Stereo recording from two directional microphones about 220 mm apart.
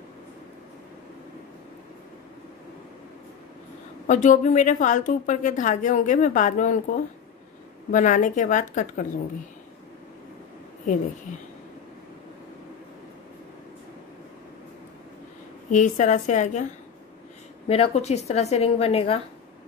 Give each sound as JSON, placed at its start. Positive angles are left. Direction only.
{"t": 4.1, "sound": "a woman's voice", "side_deg": 35}
{"t": 15.7, "sound": "a woman's voice", "side_deg": 35}
{"t": 17.6, "sound": "a woman's voice", "side_deg": 30}